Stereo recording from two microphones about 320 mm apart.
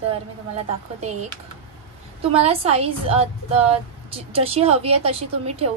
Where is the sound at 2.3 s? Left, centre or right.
Centre.